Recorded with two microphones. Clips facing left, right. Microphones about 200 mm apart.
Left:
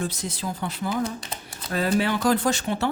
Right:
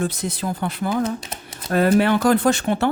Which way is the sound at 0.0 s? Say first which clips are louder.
Right 5 dB; 55° right (ahead or behind).